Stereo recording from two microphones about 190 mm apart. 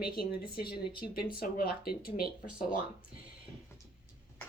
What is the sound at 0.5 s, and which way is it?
A woman's voice, 55° left (ahead or behind).